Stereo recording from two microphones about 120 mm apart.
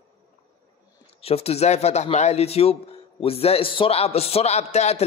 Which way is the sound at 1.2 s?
55° left (ahead or behind).